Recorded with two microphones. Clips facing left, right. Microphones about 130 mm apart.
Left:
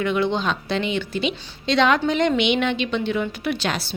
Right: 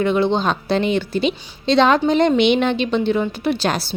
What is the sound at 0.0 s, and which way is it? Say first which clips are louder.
A woman's voice: right 4 dB; 30° right (ahead or behind).